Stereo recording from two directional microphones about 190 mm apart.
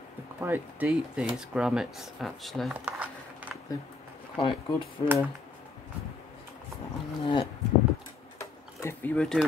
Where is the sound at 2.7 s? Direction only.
10° right (ahead or behind).